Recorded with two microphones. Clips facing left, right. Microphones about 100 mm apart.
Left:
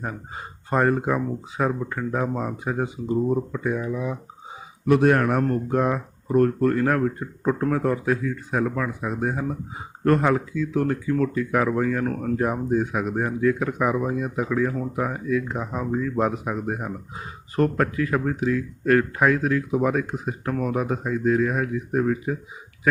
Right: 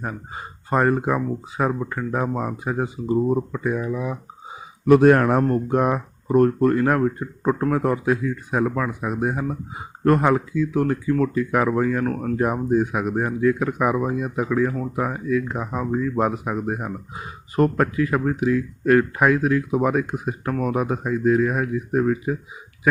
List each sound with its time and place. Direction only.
0.0 s speech: 5° right (ahead or behind)
4.9 s speech: 40° right (ahead or behind)
5.3 s speech: 25° right (ahead or behind)